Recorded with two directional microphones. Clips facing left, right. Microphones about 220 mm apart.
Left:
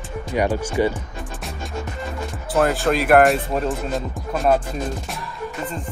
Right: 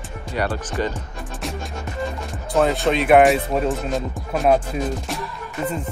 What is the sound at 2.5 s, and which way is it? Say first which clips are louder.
Speech: even; centre (ahead or behind).